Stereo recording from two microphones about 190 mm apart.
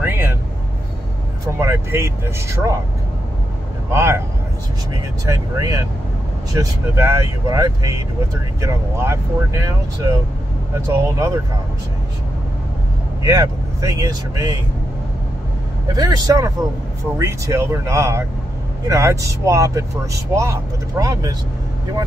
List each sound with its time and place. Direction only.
1.6 s speech: 15° right (ahead or behind)
3.9 s speech: 15° right (ahead or behind)
5.2 s speech: 15° right (ahead or behind)
13.2 s speech: 15° right (ahead or behind)
15.9 s speech: 20° right (ahead or behind)